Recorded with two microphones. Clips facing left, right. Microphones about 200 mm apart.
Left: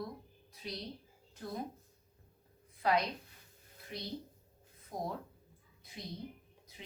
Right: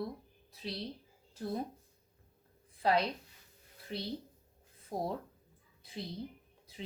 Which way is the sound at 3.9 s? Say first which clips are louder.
Right 3 dB; 30° right (ahead or behind).